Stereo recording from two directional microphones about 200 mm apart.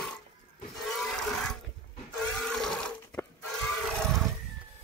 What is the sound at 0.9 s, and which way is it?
Wood, centre (ahead or behind).